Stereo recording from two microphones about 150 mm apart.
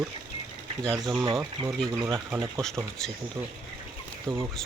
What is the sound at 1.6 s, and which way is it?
Speech, 35° right (ahead or behind).